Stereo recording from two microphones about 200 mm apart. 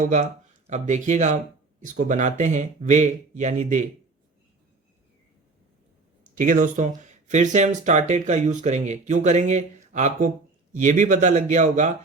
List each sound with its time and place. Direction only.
0.0 s speech: 40° right (ahead or behind)
6.3 s speech: 40° right (ahead or behind)